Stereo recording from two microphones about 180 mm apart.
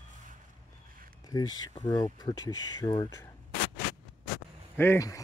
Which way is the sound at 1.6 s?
20° left (ahead or behind).